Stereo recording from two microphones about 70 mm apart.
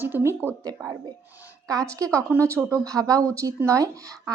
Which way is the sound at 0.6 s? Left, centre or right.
Right.